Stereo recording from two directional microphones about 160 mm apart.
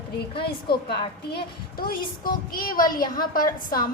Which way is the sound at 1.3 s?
70° left (ahead or behind).